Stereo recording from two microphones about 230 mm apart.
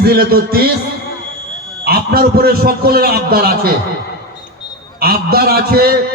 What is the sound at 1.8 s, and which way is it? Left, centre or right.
A man's voice, right.